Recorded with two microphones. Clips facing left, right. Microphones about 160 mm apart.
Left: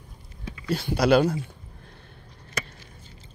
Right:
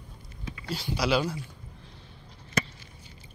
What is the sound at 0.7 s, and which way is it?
Speech, 55° left (ahead or behind).